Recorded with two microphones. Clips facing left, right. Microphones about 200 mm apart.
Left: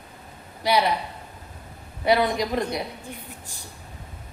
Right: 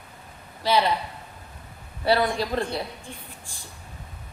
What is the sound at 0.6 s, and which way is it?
Speech, 15° left (ahead or behind).